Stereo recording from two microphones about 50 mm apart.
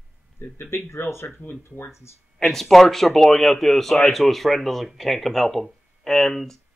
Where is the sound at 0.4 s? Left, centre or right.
Left.